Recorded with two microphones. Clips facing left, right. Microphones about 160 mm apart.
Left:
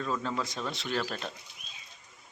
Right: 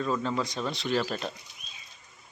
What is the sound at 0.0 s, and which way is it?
Speech, centre (ahead or behind).